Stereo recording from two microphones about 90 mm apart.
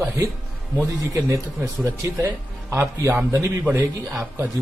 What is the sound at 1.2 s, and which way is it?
Speech, 40° right (ahead or behind).